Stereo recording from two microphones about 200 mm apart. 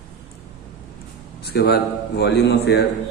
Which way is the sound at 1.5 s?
50° left (ahead or behind).